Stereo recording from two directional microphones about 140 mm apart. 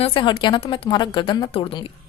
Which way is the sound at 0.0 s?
35° left (ahead or behind).